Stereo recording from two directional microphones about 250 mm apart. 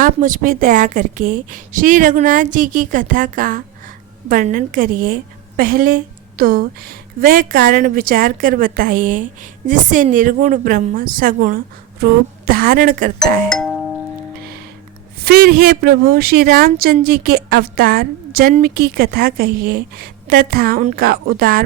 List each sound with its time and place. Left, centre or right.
0.0 s a woman's voice: right
13.1 s speech: centre
14.3 s music: right
15.2 s a woman's voice: right